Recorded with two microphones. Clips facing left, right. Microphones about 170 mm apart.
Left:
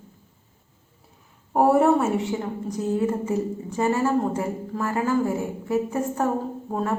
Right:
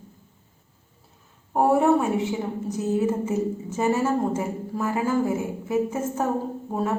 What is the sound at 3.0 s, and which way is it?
A woman's voice, 20° right (ahead or behind).